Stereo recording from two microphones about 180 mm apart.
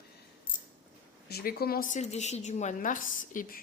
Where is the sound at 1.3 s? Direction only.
55° left (ahead or behind).